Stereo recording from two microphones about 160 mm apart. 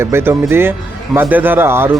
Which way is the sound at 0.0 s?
15° right (ahead or behind).